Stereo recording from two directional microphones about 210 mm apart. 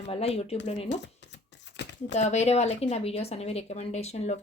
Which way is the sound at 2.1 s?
35° left (ahead or behind).